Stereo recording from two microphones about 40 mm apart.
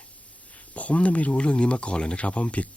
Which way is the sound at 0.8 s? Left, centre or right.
Left.